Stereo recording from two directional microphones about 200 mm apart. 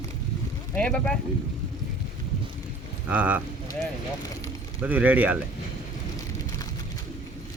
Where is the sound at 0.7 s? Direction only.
5° left (ahead or behind).